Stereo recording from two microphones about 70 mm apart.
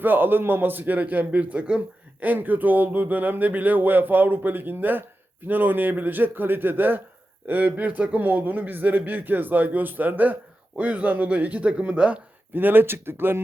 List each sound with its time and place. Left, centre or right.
0.0 s a man's voice: right